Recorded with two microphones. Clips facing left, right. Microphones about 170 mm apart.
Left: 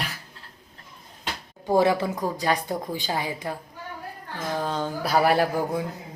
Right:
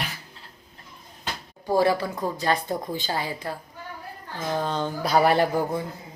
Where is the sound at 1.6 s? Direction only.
20° left (ahead or behind).